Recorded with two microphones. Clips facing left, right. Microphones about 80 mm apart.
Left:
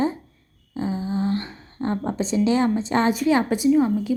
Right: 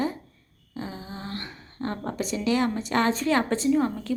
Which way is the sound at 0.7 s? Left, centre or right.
Left.